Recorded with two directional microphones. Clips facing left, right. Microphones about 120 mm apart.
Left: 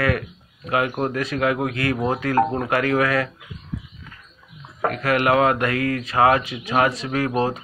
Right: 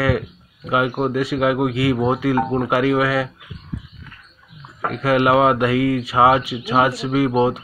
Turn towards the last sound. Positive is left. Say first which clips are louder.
# right 5 dB
turn(degrees=-5)  # may be behind; listen again after turning